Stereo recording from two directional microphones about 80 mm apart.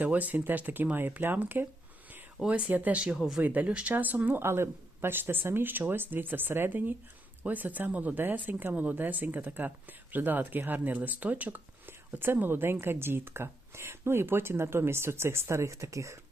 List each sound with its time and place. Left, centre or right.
0.0 s speech: centre
3.4 s speech: centre; by 16.1 s right